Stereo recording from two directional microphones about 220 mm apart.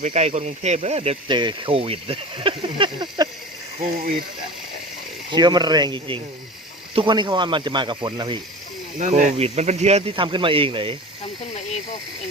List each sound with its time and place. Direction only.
0.0 s speech: 30° right (ahead or behind)
5.3 s speech: 20° right (ahead or behind)
9.0 s speech: 35° right (ahead or behind)